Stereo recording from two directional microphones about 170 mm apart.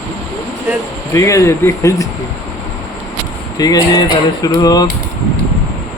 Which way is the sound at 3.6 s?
25° left (ahead or behind).